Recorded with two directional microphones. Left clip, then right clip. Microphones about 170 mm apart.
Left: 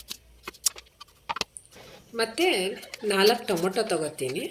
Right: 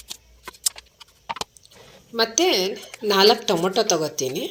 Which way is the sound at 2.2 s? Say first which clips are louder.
Right 5 dB; 25° right (ahead or behind).